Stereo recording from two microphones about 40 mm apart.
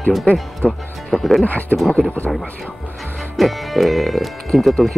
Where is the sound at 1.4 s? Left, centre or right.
Left.